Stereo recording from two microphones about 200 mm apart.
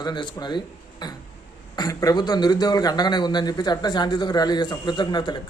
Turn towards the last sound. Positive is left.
turn(degrees=20)  # may be behind; listen again after turning